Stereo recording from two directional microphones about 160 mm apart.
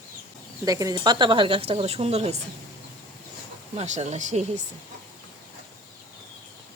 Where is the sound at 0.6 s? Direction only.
20° right (ahead or behind); by 2.3 s 40° right (ahead or behind).